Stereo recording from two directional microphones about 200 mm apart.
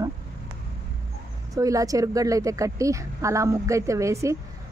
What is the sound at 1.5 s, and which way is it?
A woman's voice, 15° right (ahead or behind).